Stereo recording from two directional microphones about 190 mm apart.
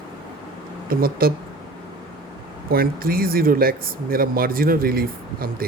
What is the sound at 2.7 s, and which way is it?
Speech, 50° right (ahead or behind).